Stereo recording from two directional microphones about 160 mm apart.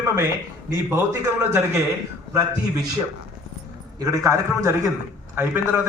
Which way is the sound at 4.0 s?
20° right (ahead or behind).